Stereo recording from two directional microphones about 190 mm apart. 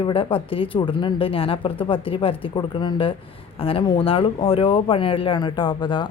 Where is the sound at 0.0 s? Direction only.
30° left (ahead or behind).